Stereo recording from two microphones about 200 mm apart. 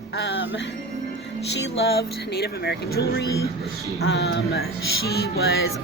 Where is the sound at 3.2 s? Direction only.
15° left (ahead or behind).